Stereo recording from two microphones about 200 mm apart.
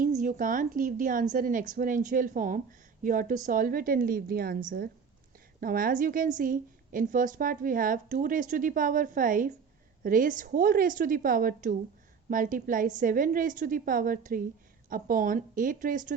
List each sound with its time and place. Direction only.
0.0 s a woman's voice: 40° right (ahead or behind)